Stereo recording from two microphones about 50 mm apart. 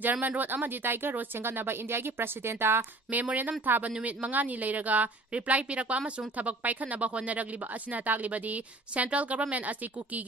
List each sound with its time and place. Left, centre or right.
0.0 s a woman's voice: right
3.1 s a woman's voice: right